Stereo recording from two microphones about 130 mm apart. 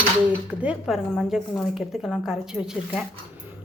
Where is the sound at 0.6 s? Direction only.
5° right (ahead or behind).